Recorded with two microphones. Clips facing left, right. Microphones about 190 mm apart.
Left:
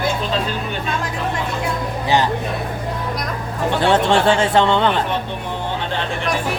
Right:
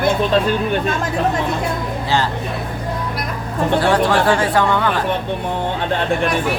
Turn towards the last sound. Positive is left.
turn(degrees=25)  # may be behind; listen again after turning